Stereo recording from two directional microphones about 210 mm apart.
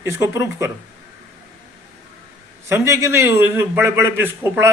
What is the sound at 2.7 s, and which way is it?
A man's voice, 10° right (ahead or behind).